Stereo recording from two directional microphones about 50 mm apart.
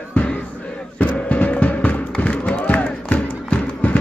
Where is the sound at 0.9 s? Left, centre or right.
Left.